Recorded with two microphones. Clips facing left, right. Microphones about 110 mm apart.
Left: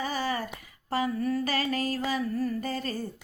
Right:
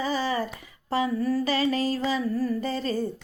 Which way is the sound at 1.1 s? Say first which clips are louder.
Right 3 dB; 35° right (ahead or behind).